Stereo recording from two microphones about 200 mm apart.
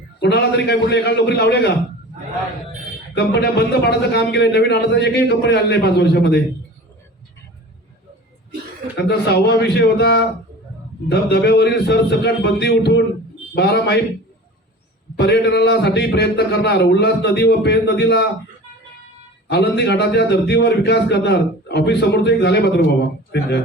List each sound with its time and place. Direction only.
0.2 s a man's voice: 55° left (ahead or behind)
3.2 s a man's voice: 55° left (ahead or behind)
9.0 s a man's voice: 55° left (ahead or behind)
15.1 s a man's voice: 55° left (ahead or behind)
19.5 s a man's voice: 55° left (ahead or behind)